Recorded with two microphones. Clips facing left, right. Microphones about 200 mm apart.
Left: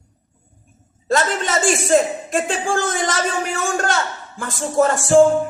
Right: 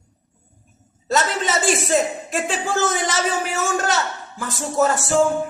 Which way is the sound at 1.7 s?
50° left (ahead or behind).